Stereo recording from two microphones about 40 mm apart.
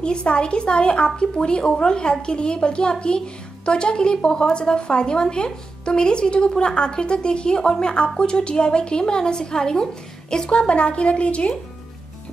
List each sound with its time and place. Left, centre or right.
0.0 s speech: left